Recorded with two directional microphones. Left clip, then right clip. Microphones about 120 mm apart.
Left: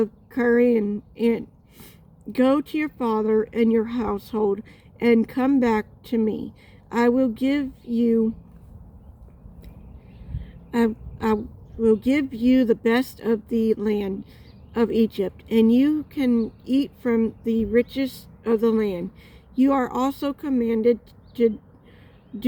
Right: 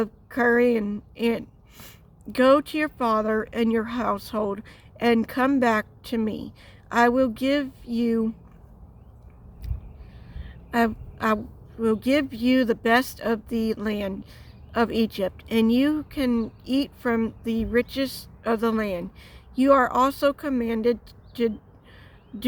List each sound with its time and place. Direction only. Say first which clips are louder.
0.0 s a woman's voice: even; 40° right (ahead or behind)
10.4 s a sound: even; 40° right (ahead or behind)
11.8 s a woman's voice: left 2 dB; 40° right (ahead or behind)